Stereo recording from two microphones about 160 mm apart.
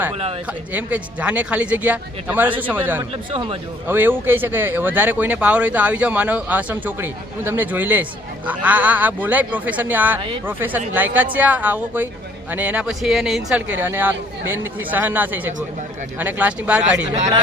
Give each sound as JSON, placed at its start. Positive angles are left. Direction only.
{"t": 0.7, "sound": "speech", "side_deg": -10}
{"t": 3.0, "sound": "speech", "side_deg": -35}
{"t": 3.8, "sound": "speech", "side_deg": -15}
{"t": 10.2, "sound": "speech", "side_deg": -35}
{"t": 10.4, "sound": "speech", "side_deg": -10}